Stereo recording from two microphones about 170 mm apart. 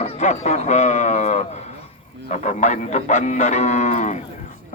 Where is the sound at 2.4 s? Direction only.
45° left (ahead or behind).